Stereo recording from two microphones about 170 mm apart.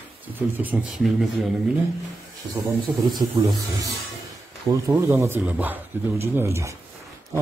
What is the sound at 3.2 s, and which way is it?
Speech, 25° right (ahead or behind).